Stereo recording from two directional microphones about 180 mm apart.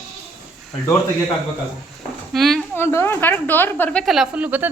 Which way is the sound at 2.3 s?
Centre (ahead or behind).